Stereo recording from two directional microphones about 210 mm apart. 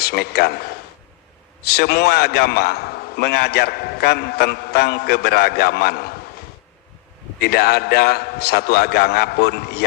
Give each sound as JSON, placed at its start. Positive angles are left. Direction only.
{"t": 0.1, "sound": "a man's voice", "side_deg": 50}
{"t": 1.6, "sound": "a man's voice", "side_deg": 50}
{"t": 7.4, "sound": "a man's voice", "side_deg": 50}